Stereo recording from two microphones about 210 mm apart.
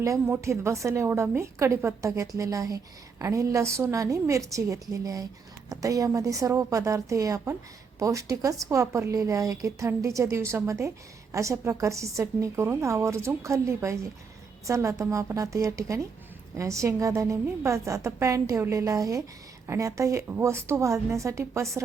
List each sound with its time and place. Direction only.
0.0 s a woman's voice: 15° right (ahead or behind)